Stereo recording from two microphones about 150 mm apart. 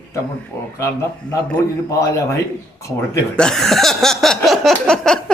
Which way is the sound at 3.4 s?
5° left (ahead or behind).